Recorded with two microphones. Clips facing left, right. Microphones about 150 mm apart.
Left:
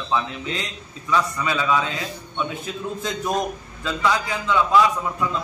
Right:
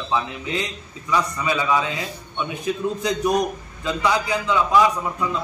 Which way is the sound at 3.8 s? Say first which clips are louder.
Right 1 dB; 15° right (ahead or behind).